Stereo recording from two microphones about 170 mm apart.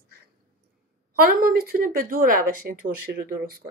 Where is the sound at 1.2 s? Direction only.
60° right (ahead or behind).